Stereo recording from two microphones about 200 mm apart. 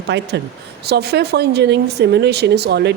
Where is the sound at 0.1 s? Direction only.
55° right (ahead or behind).